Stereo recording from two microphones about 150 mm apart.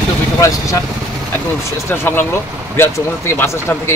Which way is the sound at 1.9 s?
15° left (ahead or behind).